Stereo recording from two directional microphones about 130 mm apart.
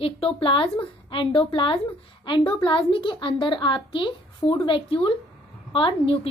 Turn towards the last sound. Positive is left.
turn(degrees=40)  # may be behind; listen again after turning